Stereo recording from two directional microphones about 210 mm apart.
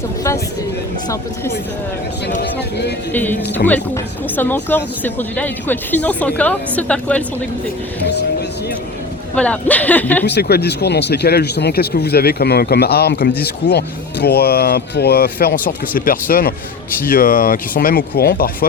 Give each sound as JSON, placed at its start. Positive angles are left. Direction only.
{"t": 3.1, "sound": "speech", "side_deg": 10}
{"t": 8.0, "sound": "speech", "side_deg": 55}
{"t": 9.3, "sound": "speech", "side_deg": 5}
{"t": 10.2, "sound": "speech", "side_deg": 50}